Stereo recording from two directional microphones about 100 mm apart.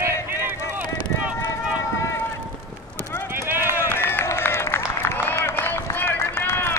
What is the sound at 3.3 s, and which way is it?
Run, 25° right (ahead or behind).